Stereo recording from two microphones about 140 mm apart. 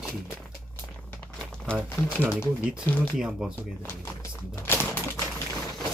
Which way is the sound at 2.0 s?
10° left (ahead or behind).